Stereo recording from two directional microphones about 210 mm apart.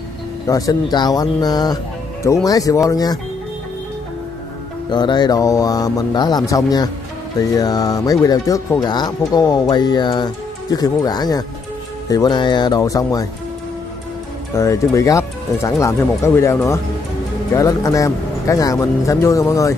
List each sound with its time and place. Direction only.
0.5 s speech: 15° left (ahead or behind)
4.8 s speech: 20° left (ahead or behind)
14.5 s speech: 15° left (ahead or behind)